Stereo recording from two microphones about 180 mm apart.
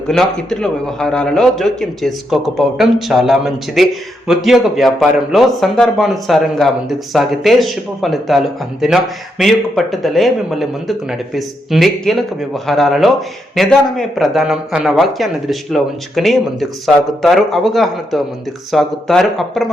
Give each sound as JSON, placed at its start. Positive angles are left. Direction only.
{"t": 0.1, "sound": "speech", "side_deg": 5}